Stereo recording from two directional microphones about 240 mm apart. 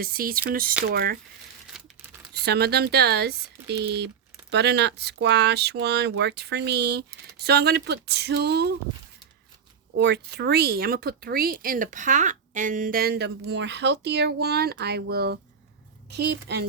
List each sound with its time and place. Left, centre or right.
0.0 s speech: right
2.4 s speech: right
9.9 s speech: right